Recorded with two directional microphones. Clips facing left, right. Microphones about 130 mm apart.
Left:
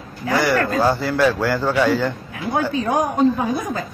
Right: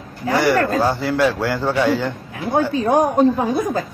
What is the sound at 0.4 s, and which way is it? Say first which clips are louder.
A man's voice: right 2 dB; 35° right (ahead or behind).